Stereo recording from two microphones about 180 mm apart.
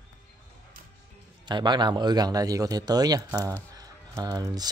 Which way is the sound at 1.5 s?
25° right (ahead or behind).